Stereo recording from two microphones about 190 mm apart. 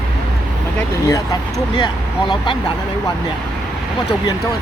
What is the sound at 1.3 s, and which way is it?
Speech, 20° left (ahead or behind).